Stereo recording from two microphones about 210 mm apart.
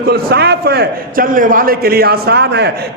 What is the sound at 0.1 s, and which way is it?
A man's voice, 50° right (ahead or behind).